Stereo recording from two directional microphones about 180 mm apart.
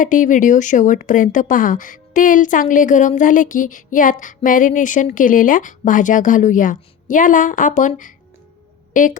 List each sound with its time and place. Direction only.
0.0 s speech: 45° left (ahead or behind)